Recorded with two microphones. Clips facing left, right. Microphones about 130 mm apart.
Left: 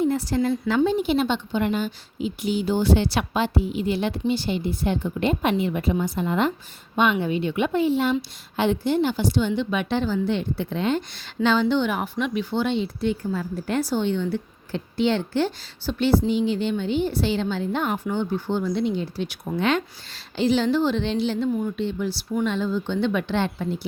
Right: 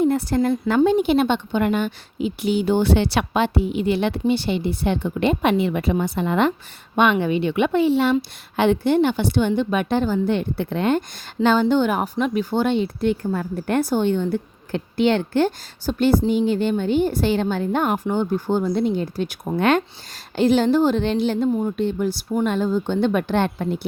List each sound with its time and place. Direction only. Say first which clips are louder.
0.0 s a woman's voice: right 3 dB; 55° right (ahead or behind); by 8.1 s 75° right (ahead or behind)
8.5 s a woman's voice: right 4 dB; 60° right (ahead or behind)
9.5 s speech: right 4 dB; 45° right (ahead or behind)